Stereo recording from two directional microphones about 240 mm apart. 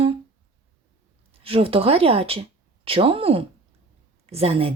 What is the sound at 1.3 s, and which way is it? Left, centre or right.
A woman's voice, right.